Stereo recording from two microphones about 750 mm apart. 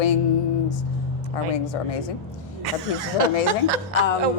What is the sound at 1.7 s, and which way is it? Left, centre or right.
Speech, left.